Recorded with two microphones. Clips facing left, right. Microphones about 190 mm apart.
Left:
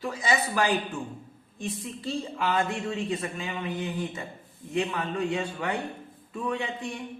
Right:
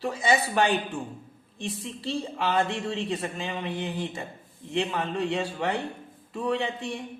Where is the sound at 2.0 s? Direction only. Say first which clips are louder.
Right 1 dB; 30° right (ahead or behind).